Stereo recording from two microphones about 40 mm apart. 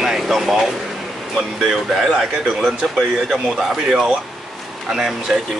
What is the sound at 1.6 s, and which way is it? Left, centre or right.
Speech, centre.